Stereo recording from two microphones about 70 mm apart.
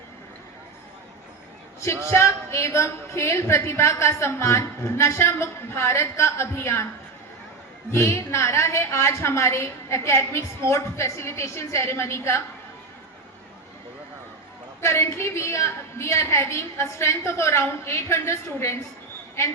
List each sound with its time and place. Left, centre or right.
1.8 s a woman's voice: left
7.9 s a woman's voice: left
14.8 s a woman's voice: left